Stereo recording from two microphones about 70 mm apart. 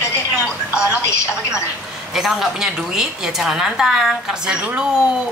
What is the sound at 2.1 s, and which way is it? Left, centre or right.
A woman's voice, centre.